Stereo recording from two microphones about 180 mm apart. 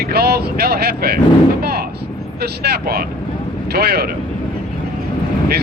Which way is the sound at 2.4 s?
60° right (ahead or behind).